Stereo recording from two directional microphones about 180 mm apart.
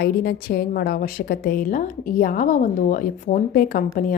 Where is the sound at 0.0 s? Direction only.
55° left (ahead or behind).